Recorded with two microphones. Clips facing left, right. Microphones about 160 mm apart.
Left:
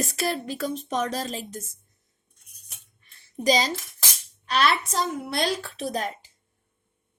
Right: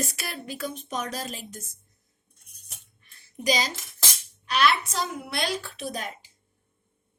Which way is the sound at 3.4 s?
30° left (ahead or behind).